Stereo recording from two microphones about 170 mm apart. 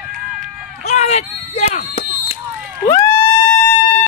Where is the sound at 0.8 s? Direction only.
40° left (ahead or behind).